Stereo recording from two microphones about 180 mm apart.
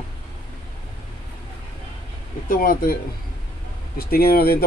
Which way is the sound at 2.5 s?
50° left (ahead or behind).